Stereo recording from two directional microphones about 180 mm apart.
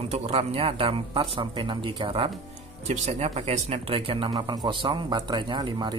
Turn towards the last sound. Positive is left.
turn(degrees=-25)  # may be behind; listen again after turning